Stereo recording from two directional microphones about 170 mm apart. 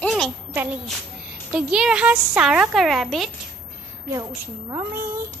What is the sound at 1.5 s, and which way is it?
Speech, 5° right (ahead or behind).